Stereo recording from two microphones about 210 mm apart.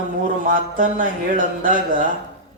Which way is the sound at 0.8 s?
40° right (ahead or behind).